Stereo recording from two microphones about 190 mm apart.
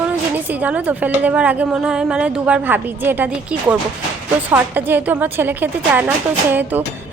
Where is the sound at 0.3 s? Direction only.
10° right (ahead or behind).